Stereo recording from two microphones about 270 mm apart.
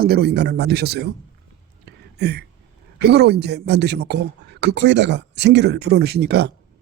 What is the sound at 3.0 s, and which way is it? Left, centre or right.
Speech, right.